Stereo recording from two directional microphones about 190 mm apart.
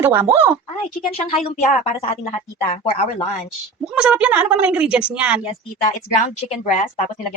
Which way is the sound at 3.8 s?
5° right (ahead or behind).